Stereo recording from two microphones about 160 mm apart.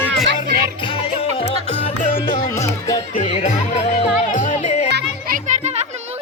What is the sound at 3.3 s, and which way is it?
Music, 40° left (ahead or behind).